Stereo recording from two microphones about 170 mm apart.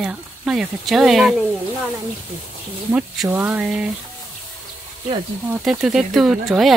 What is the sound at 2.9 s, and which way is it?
Speech, 5° right (ahead or behind).